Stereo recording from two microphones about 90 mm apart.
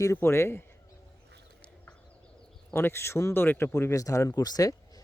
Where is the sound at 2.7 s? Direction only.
25° left (ahead or behind).